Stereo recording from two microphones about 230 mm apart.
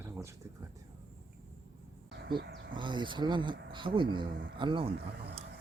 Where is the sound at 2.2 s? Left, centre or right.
Right.